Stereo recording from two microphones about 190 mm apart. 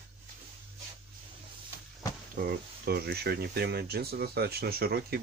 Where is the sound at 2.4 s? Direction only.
50° right (ahead or behind).